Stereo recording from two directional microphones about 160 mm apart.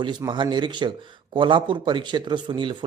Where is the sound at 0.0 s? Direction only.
30° right (ahead or behind).